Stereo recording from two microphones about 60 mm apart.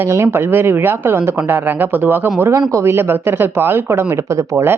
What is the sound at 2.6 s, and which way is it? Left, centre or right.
Speech, right.